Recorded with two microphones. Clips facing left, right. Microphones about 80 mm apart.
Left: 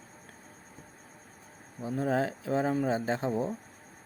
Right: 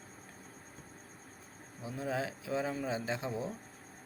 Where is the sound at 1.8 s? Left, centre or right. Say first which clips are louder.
Left 7 dB; left.